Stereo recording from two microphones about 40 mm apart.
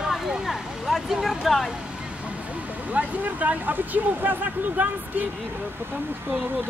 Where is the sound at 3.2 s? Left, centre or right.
Right.